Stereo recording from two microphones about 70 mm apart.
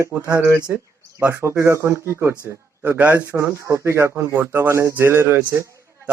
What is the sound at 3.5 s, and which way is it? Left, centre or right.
Speech, right.